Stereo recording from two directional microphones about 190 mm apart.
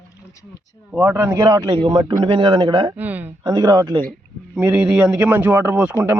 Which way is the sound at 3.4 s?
20° right (ahead or behind).